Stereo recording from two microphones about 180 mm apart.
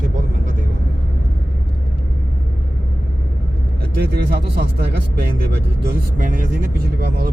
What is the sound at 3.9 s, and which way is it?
Speech, 60° right (ahead or behind).